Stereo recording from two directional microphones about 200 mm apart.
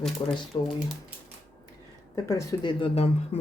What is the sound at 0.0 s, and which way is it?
Speech, centre (ahead or behind).